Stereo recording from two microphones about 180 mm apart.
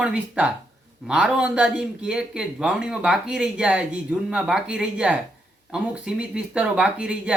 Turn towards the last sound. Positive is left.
turn(degrees=-5)  # may be behind; listen again after turning